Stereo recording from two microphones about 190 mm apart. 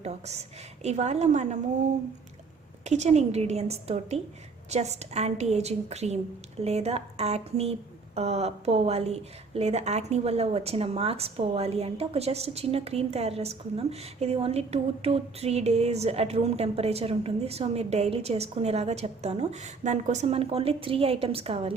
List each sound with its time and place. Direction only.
0.0 s a woman's voice: 35° right (ahead or behind)
2.8 s a woman's voice: 35° right (ahead or behind)